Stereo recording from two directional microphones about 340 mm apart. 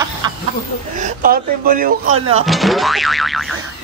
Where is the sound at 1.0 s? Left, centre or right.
Right.